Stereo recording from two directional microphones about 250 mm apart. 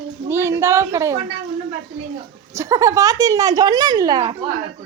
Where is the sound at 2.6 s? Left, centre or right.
Centre.